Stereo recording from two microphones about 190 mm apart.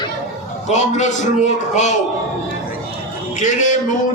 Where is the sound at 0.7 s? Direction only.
40° left (ahead or behind).